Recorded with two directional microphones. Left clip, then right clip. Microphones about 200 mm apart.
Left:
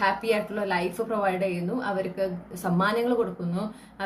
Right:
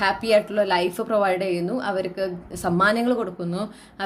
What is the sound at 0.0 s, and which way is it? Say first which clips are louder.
A woman's voice: right 5 dB; 45° right (ahead or behind).